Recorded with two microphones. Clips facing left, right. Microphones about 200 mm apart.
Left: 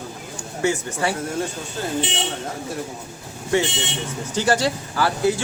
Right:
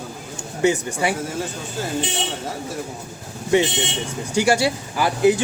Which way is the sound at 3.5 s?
20° right (ahead or behind).